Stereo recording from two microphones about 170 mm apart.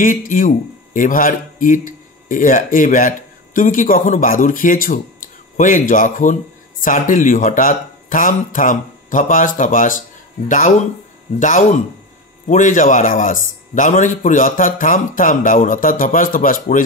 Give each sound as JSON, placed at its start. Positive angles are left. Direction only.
{"t": 0.0, "sound": "a man's voice", "side_deg": 50}
{"t": 11.3, "sound": "a man's voice", "side_deg": 50}